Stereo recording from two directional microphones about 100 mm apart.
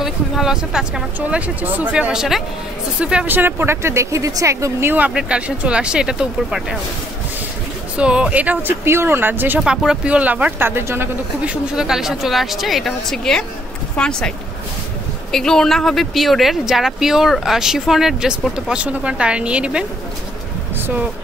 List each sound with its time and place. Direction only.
0.0 s speech: 5° right (ahead or behind)
8.0 s speech: 10° right (ahead or behind)
9.6 s speech: 5° right (ahead or behind); by 11.1 s 25° right (ahead or behind)
11.4 s speech: 10° right (ahead or behind); by 14.3 s 10° left (ahead or behind)
15.3 s speech: 5° left (ahead or behind); by 19.9 s 10° right (ahead or behind)
20.7 s a sound: 20° right (ahead or behind)